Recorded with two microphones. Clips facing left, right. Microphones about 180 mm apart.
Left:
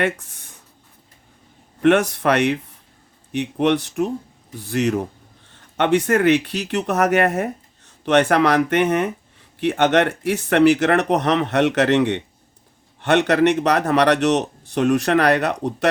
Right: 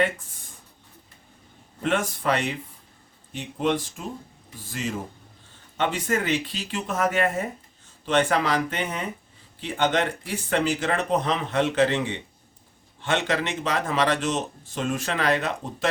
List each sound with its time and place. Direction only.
0.0 s speech: 70° left (ahead or behind)
1.8 s speech: 70° left (ahead or behind)